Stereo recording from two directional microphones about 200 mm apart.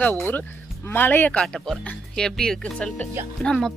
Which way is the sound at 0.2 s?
10° left (ahead or behind).